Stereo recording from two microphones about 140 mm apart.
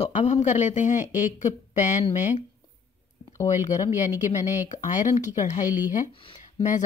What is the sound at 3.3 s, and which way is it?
Speech, 20° left (ahead or behind).